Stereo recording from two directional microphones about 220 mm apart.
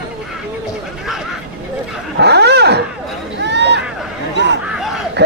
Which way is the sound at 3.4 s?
50° right (ahead or behind).